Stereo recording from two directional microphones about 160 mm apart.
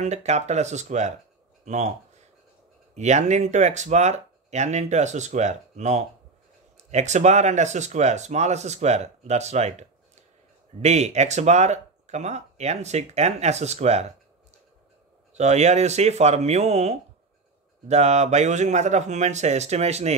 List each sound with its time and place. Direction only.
0.0 s speech: 45° right (ahead or behind)
15.3 s speech: 45° right (ahead or behind)